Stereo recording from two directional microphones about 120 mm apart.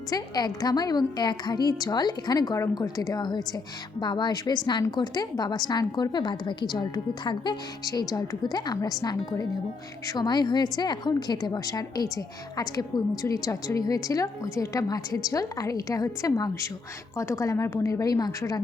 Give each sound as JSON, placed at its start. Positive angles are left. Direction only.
{"t": 0.1, "sound": "a woman's voice", "side_deg": 30}